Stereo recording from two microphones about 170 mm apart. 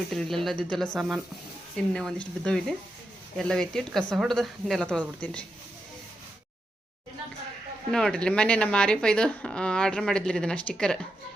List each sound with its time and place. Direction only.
0.1 s speech: centre (ahead or behind)
7.9 s speech: 5° left (ahead or behind)